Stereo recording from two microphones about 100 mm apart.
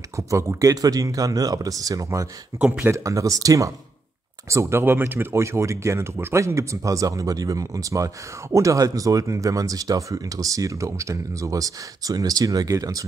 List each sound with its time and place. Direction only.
0.1 s speech: 30° right (ahead or behind)
2.6 s speech: 15° right (ahead or behind)
2.9 s speech: 30° right (ahead or behind)